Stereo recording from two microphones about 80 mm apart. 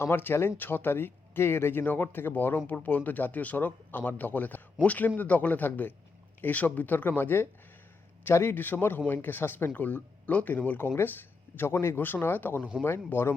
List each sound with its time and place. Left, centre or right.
0.0 s speech: left